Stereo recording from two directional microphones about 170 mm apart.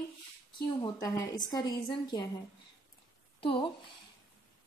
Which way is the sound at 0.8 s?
20° left (ahead or behind).